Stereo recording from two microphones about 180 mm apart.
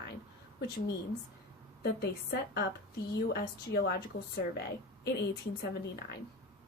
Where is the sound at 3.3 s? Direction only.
60° left (ahead or behind).